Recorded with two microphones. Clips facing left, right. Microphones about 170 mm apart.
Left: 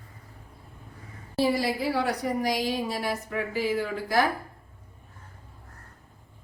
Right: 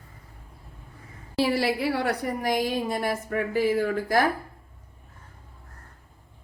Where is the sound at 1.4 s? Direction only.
70° right (ahead or behind); by 4.3 s 50° right (ahead or behind).